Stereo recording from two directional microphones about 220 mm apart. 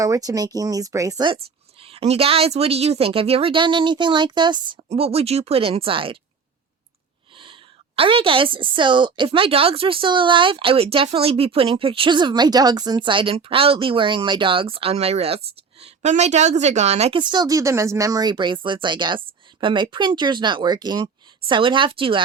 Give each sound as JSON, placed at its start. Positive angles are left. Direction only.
{"t": 0.0, "sound": "a woman's voice", "side_deg": -15}
{"t": 7.3, "sound": "a woman's voice", "side_deg": -25}